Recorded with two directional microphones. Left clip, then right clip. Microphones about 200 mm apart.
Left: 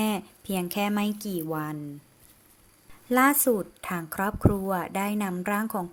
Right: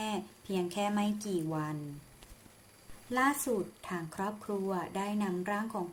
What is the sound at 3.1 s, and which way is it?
Speech, 45° left (ahead or behind).